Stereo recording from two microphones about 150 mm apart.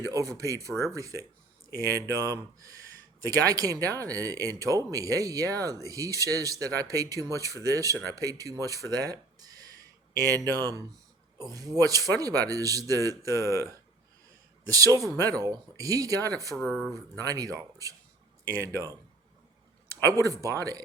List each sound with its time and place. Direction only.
0.0 s speech: 20° right (ahead or behind)
16.6 s speech: 5° left (ahead or behind)
16.9 s speech: 25° right (ahead or behind)
20.1 s speech: 20° right (ahead or behind)